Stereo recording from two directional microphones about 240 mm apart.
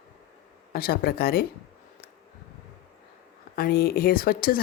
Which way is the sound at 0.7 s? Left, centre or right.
Left.